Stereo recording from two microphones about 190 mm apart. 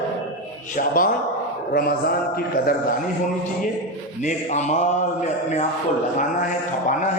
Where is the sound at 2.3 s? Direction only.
50° left (ahead or behind).